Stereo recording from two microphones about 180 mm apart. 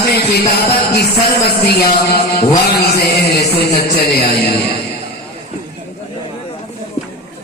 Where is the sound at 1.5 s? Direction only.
60° left (ahead or behind).